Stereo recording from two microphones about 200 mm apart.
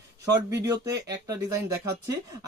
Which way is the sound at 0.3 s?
15° right (ahead or behind).